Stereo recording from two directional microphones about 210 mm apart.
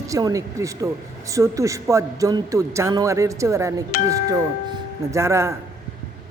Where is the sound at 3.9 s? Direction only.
45° left (ahead or behind).